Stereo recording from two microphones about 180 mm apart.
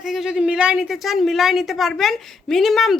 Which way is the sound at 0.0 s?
Centre (ahead or behind).